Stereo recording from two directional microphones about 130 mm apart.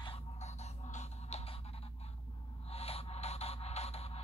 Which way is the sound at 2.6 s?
50° left (ahead or behind).